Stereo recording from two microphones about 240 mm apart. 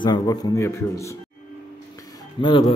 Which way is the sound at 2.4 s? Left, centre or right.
Left.